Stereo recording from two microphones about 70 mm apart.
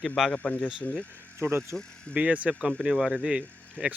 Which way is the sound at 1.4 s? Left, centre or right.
Right.